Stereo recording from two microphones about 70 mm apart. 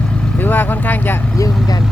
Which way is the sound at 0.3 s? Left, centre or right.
Left.